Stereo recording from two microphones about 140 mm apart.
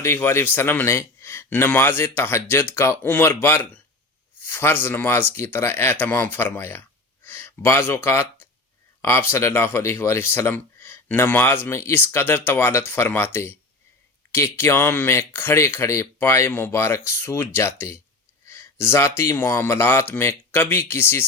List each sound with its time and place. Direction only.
0.0 s speech: 20° left (ahead or behind)
9.0 s a sound: 20° left (ahead or behind)
9.3 s speech: 15° left (ahead or behind)